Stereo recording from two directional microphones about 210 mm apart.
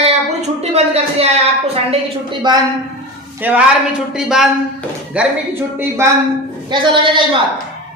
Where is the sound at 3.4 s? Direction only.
10° right (ahead or behind).